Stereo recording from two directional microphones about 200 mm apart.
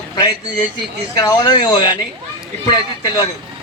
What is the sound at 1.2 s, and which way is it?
Speech, 20° left (ahead or behind).